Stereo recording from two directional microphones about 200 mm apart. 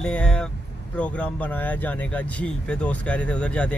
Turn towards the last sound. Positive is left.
turn(degrees=5)  # may be behind; listen again after turning